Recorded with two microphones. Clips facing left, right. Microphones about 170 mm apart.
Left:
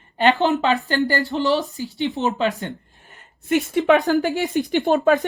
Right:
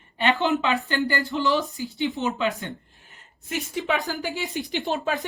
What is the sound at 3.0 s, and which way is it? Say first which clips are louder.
Speech: left 5 dB; 65° left (ahead or behind).